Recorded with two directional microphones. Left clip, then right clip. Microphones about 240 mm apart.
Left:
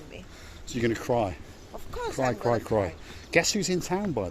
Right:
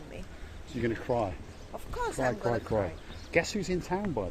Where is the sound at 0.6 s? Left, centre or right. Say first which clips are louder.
Left 4 dB; left.